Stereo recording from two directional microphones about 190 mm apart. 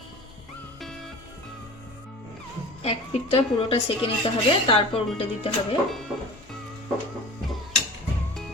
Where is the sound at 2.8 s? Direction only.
30° left (ahead or behind).